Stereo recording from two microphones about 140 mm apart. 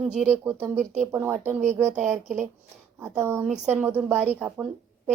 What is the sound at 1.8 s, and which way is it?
Speech, 60° right (ahead or behind).